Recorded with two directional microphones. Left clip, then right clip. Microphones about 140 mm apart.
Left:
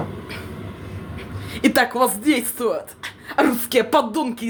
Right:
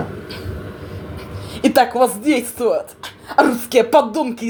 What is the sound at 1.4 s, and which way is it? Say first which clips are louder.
A woman's voice: right 4 dB; 20° left (ahead or behind).